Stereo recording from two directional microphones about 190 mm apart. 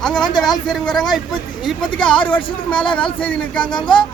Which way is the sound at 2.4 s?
25° left (ahead or behind).